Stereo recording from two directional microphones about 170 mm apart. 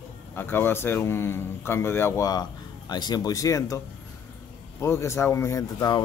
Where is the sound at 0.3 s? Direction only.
10° left (ahead or behind).